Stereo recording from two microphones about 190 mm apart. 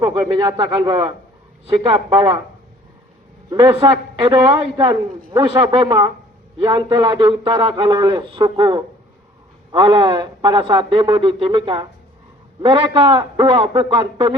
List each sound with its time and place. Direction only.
0.3 s a man's voice: 20° right (ahead or behind)
3.5 s a man's voice: 25° right (ahead or behind)